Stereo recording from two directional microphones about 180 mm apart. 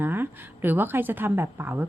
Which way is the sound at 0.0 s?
10° right (ahead or behind).